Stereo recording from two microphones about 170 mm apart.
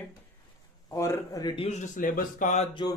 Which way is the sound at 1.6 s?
45° left (ahead or behind).